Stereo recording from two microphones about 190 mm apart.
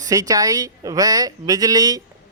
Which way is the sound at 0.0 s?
20° right (ahead or behind).